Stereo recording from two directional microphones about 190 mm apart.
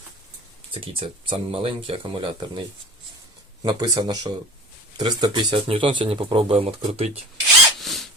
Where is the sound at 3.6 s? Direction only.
20° right (ahead or behind).